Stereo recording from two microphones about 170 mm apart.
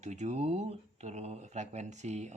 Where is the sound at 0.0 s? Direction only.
40° right (ahead or behind).